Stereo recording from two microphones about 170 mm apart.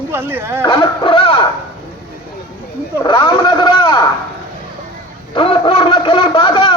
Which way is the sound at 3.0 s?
30° left (ahead or behind).